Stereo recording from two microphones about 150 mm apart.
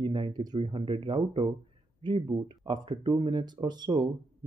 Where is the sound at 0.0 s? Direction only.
30° right (ahead or behind).